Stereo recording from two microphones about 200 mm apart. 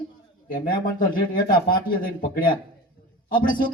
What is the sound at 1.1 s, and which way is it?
Speech, 45° left (ahead or behind).